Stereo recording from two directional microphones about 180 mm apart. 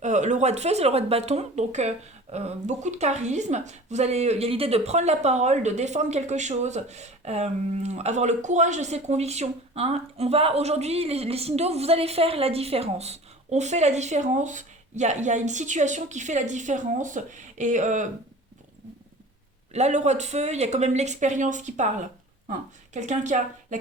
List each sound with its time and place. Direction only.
0.0 s a woman's voice: 40° right (ahead or behind)
19.7 s a woman's voice: 40° right (ahead or behind)
23.0 s speech: 40° right (ahead or behind)